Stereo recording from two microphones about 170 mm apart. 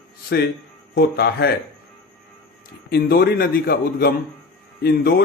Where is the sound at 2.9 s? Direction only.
70° left (ahead or behind).